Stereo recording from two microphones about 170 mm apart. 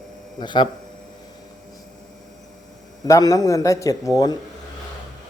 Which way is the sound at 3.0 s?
20° left (ahead or behind).